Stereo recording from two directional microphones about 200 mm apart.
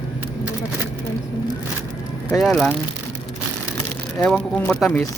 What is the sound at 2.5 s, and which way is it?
Speech, 5° left (ahead or behind).